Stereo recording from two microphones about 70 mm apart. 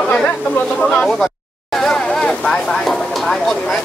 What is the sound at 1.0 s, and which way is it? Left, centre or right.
Speech, centre.